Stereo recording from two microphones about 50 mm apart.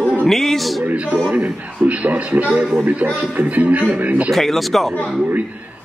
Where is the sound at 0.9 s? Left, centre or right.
Right.